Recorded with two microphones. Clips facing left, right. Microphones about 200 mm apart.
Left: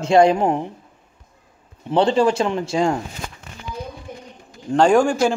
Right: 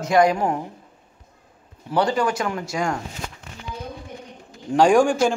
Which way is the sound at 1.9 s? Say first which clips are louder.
Left 5 dB; 25° left (ahead or behind).